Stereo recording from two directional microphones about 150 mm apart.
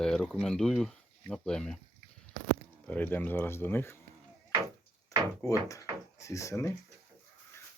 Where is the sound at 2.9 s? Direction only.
10° left (ahead or behind).